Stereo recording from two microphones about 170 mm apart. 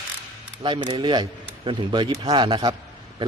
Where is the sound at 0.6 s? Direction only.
25° right (ahead or behind).